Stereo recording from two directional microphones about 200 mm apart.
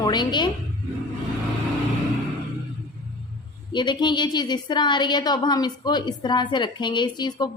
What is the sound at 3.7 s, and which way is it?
A woman's voice, 20° left (ahead or behind).